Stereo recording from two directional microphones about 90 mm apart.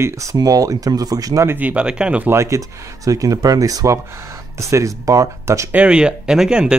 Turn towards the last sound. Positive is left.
turn(degrees=-10)  # may be behind; listen again after turning